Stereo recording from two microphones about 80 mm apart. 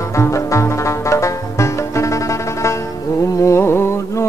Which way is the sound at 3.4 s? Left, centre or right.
Left.